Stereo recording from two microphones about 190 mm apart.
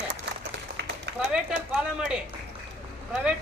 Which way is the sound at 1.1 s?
65° right (ahead or behind).